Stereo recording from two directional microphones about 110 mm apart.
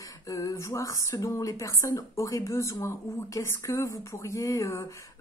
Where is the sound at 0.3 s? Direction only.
30° left (ahead or behind).